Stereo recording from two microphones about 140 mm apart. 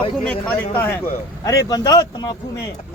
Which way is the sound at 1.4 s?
25° left (ahead or behind).